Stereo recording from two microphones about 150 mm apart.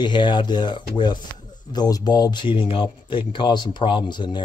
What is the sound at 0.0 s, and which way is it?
Speech, 30° left (ahead or behind).